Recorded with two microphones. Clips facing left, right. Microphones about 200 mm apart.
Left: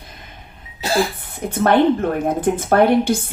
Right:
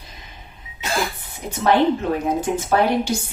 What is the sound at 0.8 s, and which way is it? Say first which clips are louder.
Cough: left 5 dB; 35° left (ahead or behind).